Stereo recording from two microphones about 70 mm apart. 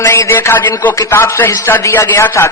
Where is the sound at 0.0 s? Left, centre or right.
Left.